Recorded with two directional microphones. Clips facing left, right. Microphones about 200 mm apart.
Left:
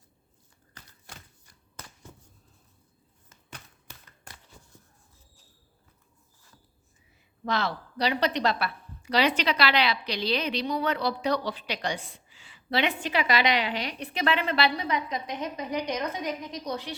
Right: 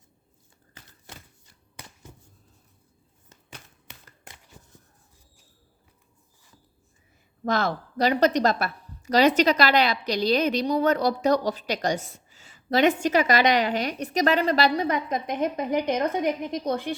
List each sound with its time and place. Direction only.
7.4 s a woman's voice: 45° right (ahead or behind)